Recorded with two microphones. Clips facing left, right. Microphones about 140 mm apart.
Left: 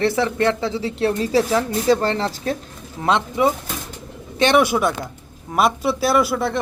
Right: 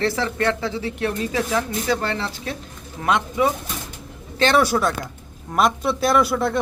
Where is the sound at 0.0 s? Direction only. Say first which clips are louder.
Left 3 dB; 20° left (ahead or behind); by 2.6 s 40° left (ahead or behind).